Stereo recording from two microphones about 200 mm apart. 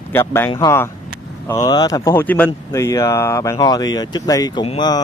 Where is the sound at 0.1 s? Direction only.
10° left (ahead or behind).